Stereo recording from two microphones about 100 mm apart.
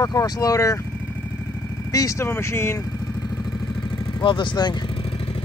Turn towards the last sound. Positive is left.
turn(degrees=50)  # may be behind; listen again after turning